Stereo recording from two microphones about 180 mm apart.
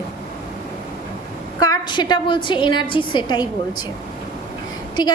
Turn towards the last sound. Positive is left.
turn(degrees=25)  # may be behind; listen again after turning